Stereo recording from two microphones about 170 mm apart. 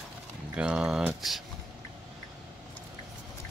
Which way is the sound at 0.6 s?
5° right (ahead or behind).